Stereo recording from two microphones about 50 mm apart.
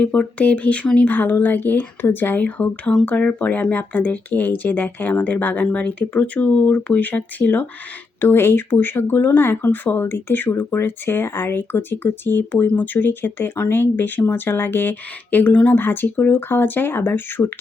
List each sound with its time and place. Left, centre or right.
0.0 s speech: left
8.2 s speech: left
15.8 s speech: left